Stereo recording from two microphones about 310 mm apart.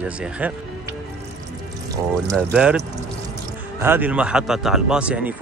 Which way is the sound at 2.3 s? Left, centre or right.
Centre.